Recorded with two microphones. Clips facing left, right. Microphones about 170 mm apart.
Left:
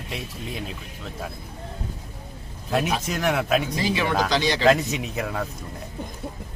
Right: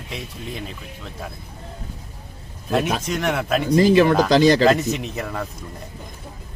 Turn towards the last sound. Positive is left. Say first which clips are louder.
# right 1 dB
turn(degrees=0)  # may be behind; listen again after turning